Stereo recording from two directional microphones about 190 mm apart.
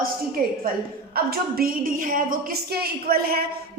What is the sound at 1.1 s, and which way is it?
A woman's voice, 50° right (ahead or behind).